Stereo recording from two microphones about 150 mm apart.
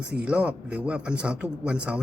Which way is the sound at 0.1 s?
5° right (ahead or behind).